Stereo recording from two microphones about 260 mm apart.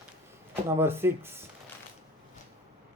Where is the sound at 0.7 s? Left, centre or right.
Centre.